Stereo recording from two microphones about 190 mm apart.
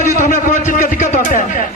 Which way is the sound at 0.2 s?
40° left (ahead or behind).